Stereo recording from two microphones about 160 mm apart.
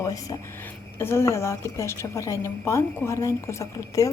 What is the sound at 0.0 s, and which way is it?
A woman's voice, 20° left (ahead or behind).